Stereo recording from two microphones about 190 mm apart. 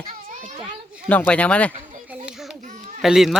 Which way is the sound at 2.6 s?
40° right (ahead or behind).